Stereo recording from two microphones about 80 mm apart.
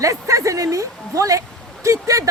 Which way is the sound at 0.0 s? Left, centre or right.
Right.